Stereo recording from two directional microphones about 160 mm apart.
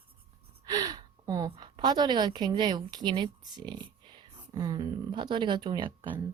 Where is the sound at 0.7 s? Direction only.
25° right (ahead or behind).